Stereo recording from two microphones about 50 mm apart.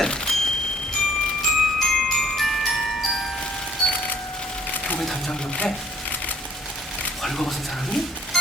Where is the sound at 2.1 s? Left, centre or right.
Centre.